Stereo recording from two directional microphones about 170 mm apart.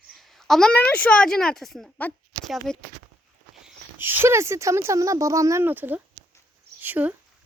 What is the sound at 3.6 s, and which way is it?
Speech, 10° right (ahead or behind).